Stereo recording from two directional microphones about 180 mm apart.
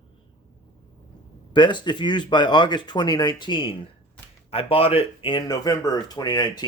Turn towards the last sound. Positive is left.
turn(degrees=25)  # may be behind; listen again after turning